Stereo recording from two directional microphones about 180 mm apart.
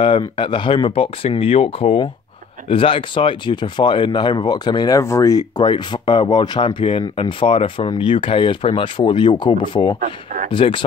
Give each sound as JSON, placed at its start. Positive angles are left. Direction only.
{"t": 0.0, "sound": "speech", "side_deg": 30}
{"t": 9.9, "sound": "speech", "side_deg": -50}
{"t": 10.5, "sound": "speech", "side_deg": 30}